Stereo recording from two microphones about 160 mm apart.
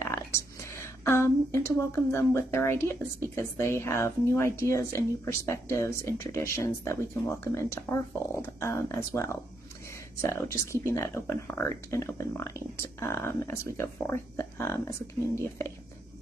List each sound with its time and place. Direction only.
0.0 s speech: 15° left (ahead or behind)